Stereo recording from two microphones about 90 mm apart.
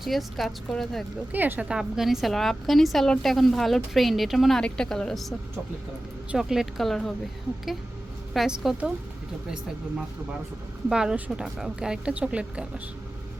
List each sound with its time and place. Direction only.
0.0 s a woman's voice: centre (ahead or behind)
1.3 s a woman's voice: 20° right (ahead or behind)
1.6 s a woman's voice: 5° right (ahead or behind)
6.3 s a woman's voice: 5° right (ahead or behind)
8.3 s a woman's voice: 5° right (ahead or behind)
10.8 s a woman's voice: 5° right (ahead or behind)